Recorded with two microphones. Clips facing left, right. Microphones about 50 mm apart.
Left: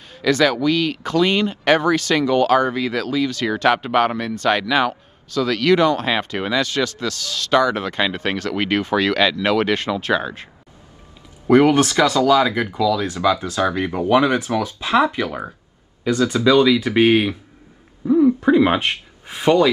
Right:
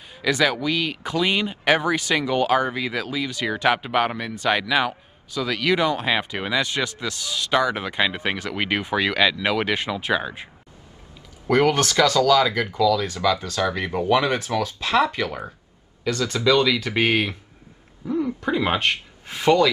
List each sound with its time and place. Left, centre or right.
0.1 s speech: centre
6.6 s speech: centre
11.4 s speech: centre
14.0 s speech: centre
18.0 s speech: centre